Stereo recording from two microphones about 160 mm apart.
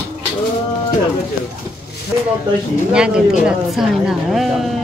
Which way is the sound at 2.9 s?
5° right (ahead or behind).